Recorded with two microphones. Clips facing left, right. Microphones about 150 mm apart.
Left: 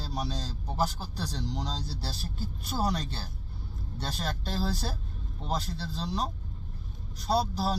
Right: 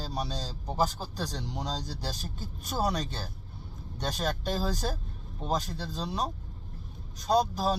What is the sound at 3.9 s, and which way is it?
Speech, 15° right (ahead or behind).